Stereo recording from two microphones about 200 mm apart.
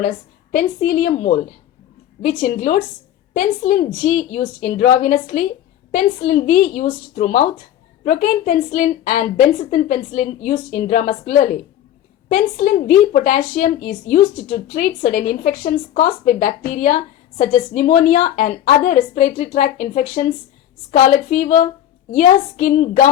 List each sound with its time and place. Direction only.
0.5 s speech: 40° left (ahead or behind)
2.4 s speech: 40° left (ahead or behind)
12.3 s speech: 40° left (ahead or behind)